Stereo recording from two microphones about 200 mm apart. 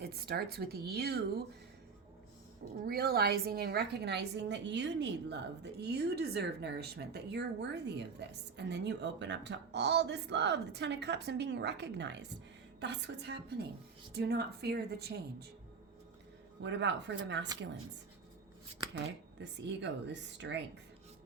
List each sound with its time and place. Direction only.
0.0 s speech: 50° right (ahead or behind)
2.8 s a woman's voice: 50° right (ahead or behind)
16.6 s a woman's voice: 65° right (ahead or behind)
19.4 s a woman's voice: 60° right (ahead or behind)